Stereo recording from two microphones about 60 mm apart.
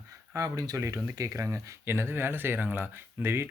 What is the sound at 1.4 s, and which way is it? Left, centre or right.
Speech, right.